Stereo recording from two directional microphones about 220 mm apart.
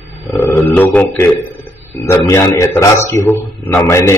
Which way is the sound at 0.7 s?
5° left (ahead or behind).